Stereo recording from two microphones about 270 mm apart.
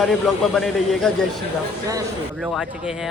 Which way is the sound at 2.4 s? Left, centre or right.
Centre.